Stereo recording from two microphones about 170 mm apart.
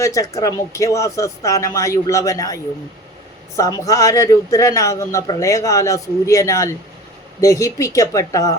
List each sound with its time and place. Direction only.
0.0 s a man's voice: 20° left (ahead or behind)
3.6 s a man's voice: 20° left (ahead or behind)